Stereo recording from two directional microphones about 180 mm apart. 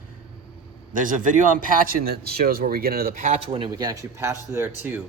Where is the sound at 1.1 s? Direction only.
45° right (ahead or behind).